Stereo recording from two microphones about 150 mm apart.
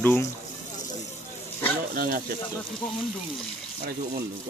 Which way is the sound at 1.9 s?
70° right (ahead or behind).